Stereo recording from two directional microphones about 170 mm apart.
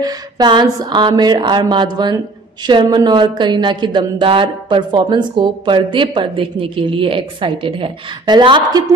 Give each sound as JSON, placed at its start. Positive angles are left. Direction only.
{"t": 0.0, "sound": "a woman's voice", "side_deg": -25}